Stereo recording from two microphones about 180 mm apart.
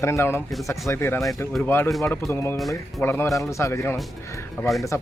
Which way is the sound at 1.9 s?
Centre (ahead or behind).